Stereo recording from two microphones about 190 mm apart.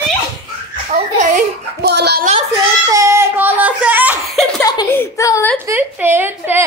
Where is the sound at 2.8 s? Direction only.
15° right (ahead or behind).